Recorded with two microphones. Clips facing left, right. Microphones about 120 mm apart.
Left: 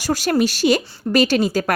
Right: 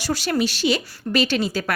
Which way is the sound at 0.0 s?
45° left (ahead or behind).